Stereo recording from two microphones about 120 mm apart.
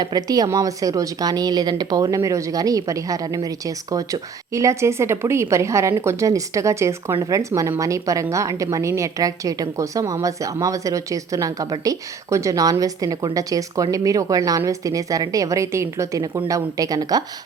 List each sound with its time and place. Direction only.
0.0 s a woman's voice: 35° right (ahead or behind)